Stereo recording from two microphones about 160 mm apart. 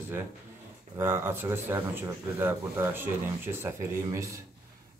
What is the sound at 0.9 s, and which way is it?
A man's voice, 15° right (ahead or behind).